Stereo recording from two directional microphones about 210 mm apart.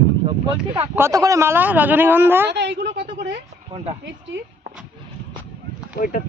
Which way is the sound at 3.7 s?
30° right (ahead or behind).